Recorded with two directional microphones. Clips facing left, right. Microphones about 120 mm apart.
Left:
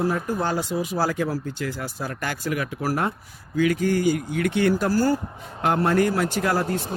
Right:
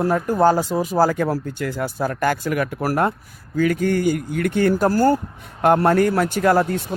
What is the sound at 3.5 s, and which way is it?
A man's voice, 45° right (ahead or behind).